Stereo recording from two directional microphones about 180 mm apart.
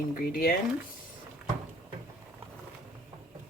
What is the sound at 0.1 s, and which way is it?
Speech, 55° left (ahead or behind).